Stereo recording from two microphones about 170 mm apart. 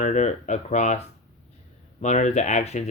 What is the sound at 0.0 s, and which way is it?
Speech, 45° left (ahead or behind).